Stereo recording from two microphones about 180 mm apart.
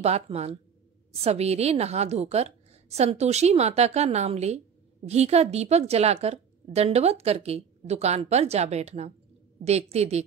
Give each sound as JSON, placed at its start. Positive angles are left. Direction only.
{"t": 0.0, "sound": "a woman's voice", "side_deg": -35}